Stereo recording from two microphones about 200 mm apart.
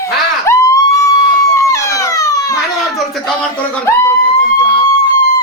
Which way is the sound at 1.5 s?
15° left (ahead or behind).